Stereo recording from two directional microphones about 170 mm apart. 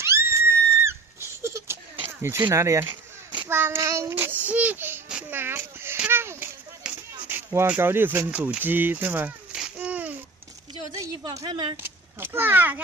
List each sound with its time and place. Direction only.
0.0 s screaming: 15° right (ahead or behind)
2.4 s speech: 15° right (ahead or behind)
3.3 s child singing: 15° right (ahead or behind)
7.2 s speech: 10° right (ahead or behind)
11.0 s speech: 20° right (ahead or behind)
11.7 s a child's voice: 15° right (ahead or behind)